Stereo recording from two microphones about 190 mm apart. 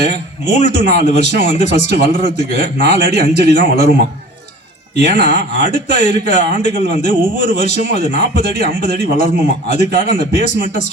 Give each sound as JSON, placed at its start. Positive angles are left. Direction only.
{"t": 0.0, "sound": "a man's voice", "side_deg": 40}
{"t": 5.2, "sound": "a man's voice", "side_deg": 35}